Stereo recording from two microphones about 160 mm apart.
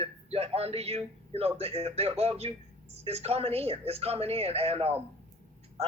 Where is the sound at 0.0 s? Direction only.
40° right (ahead or behind).